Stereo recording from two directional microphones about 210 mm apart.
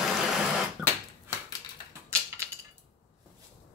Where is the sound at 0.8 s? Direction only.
5° left (ahead or behind).